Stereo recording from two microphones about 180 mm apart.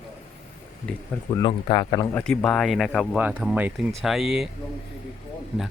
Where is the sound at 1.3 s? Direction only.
25° left (ahead or behind).